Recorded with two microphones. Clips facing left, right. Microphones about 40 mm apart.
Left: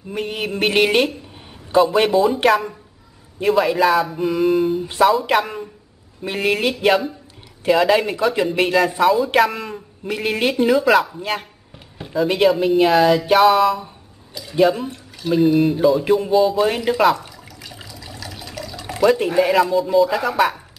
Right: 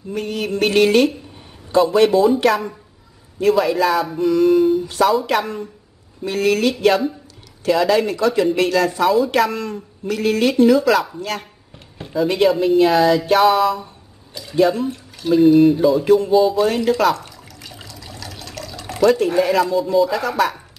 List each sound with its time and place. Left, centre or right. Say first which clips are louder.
0.1 s speech: right 1 dB; centre
2.0 s speech: right 1 dB; centre
6.2 s speech: right 2 dB; left
9.0 s speech: left 1 dB; centre
12.0 s speech: even; centre
14.3 s a sound: right 1 dB; centre
14.6 s speech: even; centre
16.6 s water: even; centre
19.2 s speech: even; centre